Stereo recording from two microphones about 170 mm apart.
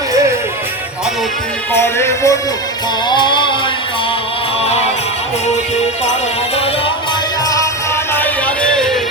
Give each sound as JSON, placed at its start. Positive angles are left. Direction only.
{"t": 1.7, "sound": "music", "side_deg": 15}
{"t": 4.6, "sound": "music", "side_deg": 35}
{"t": 8.1, "sound": "music", "side_deg": 10}